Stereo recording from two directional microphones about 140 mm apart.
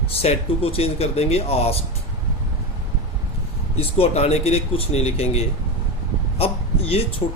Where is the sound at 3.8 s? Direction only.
45° left (ahead or behind).